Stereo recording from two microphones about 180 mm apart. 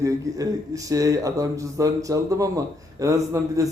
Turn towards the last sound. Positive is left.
turn(degrees=-20)  # may be behind; listen again after turning